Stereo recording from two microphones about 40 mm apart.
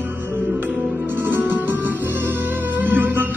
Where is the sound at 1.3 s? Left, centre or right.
Right.